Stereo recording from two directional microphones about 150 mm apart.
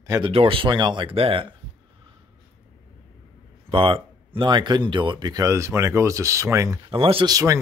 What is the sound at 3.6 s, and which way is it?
Speech, 35° right (ahead or behind).